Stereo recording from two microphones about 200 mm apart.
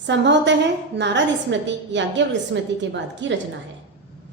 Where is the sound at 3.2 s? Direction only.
65° right (ahead or behind).